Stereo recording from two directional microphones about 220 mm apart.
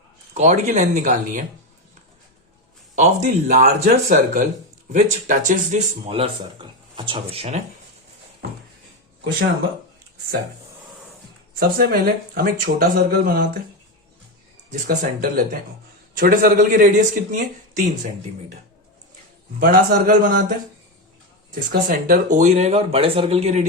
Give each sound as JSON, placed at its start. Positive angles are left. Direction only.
{"t": 0.3, "sound": "speech", "side_deg": -30}
{"t": 2.9, "sound": "speech", "side_deg": -35}
{"t": 11.6, "sound": "speech", "side_deg": -45}
{"t": 14.7, "sound": "speech", "side_deg": -40}
{"t": 19.5, "sound": "speech", "side_deg": -40}
{"t": 21.5, "sound": "speech", "side_deg": -40}